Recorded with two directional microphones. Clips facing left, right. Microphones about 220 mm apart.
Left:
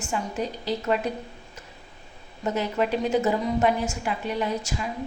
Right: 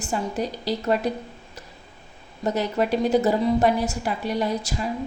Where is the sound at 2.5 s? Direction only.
40° right (ahead or behind).